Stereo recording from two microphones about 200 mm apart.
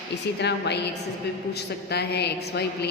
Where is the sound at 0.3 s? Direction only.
60° left (ahead or behind).